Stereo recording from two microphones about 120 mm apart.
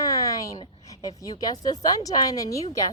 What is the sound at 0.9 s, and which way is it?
Speech, 30° left (ahead or behind).